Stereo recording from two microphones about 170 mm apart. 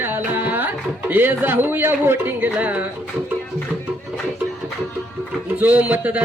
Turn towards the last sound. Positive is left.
turn(degrees=-10)  # may be behind; listen again after turning